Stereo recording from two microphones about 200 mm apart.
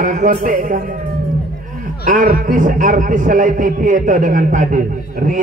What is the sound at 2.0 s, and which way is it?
Speech, 40° right (ahead or behind).